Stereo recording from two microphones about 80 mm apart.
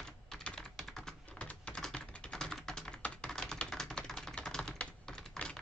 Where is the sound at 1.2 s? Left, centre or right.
Centre.